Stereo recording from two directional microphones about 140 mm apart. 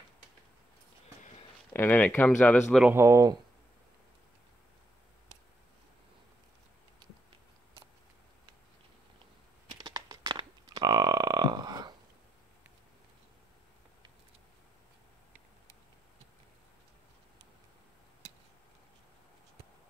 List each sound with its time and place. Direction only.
1.7 s speech: 15° left (ahead or behind)
2.9 s speech: 20° right (ahead or behind)
9.8 s a sound: 30° right (ahead or behind)